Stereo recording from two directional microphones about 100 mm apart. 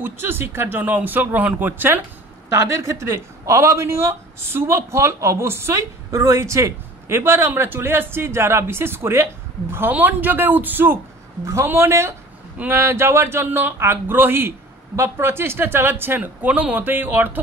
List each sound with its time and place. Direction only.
0.0 s speech: 20° right (ahead or behind)
2.5 s speech: 30° right (ahead or behind)